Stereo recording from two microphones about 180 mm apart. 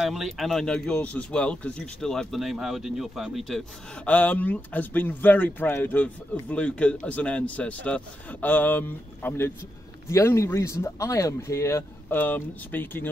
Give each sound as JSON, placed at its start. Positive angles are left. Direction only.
{"t": 0.0, "sound": "speech", "side_deg": 0}